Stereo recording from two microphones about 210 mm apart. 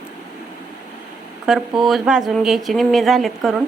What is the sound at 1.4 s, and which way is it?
Speech, centre (ahead or behind).